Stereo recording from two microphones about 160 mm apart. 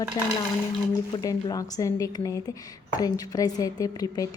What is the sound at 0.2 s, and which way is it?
A woman's voice, 25° left (ahead or behind).